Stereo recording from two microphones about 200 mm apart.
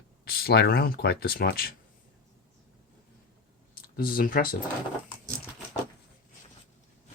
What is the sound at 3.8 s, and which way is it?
Speech, 45° left (ahead or behind).